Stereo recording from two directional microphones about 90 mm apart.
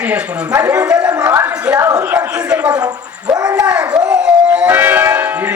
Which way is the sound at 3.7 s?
10° right (ahead or behind).